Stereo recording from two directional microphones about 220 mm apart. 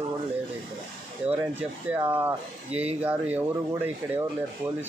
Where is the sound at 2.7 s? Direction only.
30° right (ahead or behind).